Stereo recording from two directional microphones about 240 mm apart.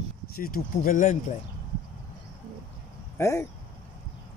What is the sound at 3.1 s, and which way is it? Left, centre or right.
Speech, centre.